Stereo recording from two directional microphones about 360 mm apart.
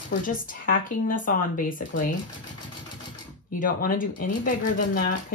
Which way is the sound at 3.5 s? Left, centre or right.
Left.